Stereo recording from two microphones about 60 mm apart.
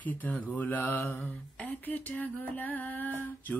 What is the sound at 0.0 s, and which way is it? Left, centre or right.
Mantra, left.